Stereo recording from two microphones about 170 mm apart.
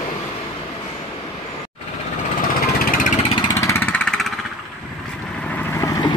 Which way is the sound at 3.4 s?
20° left (ahead or behind).